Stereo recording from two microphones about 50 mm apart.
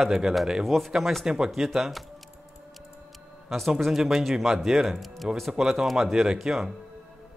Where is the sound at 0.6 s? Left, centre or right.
Centre.